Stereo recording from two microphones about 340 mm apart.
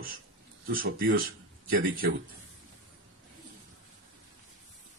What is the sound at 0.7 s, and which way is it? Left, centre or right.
Speech, right.